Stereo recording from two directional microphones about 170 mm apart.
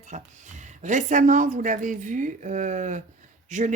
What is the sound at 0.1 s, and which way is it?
Speech, 45° right (ahead or behind).